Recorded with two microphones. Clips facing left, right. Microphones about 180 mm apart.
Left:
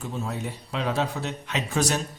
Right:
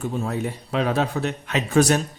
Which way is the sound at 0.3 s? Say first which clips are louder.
Right 6 dB; 55° right (ahead or behind).